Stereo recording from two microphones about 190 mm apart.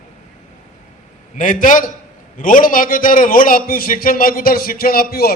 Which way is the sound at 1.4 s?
45° left (ahead or behind).